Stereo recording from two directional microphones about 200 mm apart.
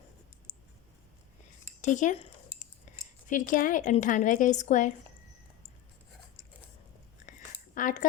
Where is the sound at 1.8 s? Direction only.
40° left (ahead or behind).